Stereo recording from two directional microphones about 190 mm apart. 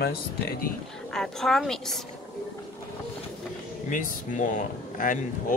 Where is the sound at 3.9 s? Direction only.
45° left (ahead or behind).